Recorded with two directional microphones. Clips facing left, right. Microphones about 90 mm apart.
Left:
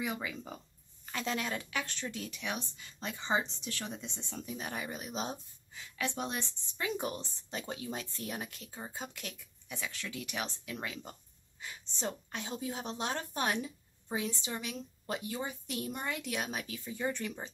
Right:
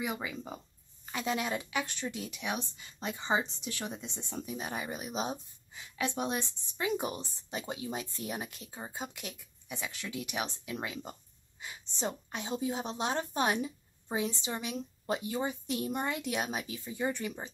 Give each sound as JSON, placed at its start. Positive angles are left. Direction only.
{"t": 0.0, "sound": "a woman's voice", "side_deg": -15}